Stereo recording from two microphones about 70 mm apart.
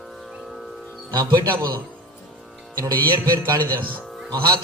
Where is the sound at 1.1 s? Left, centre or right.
Right.